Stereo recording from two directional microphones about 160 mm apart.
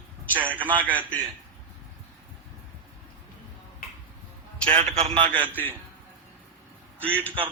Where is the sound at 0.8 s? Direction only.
10° right (ahead or behind).